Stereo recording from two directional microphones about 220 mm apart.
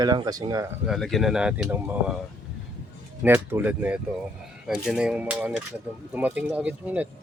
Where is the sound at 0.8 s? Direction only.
Centre (ahead or behind).